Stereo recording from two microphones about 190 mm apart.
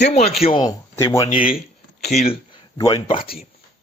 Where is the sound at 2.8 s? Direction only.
20° left (ahead or behind).